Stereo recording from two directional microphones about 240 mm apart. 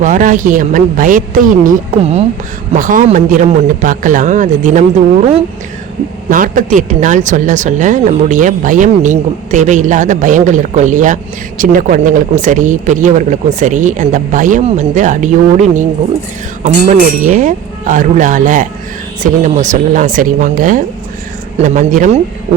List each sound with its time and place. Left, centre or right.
0.0 s speech: right